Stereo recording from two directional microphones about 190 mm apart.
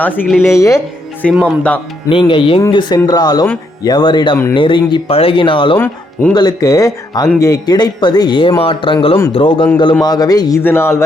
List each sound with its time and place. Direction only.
0.4 s speech: 15° left (ahead or behind)
1.2 s speech: centre (ahead or behind)
2.0 s speech: 25° left (ahead or behind)
5.7 s speech: 10° left (ahead or behind)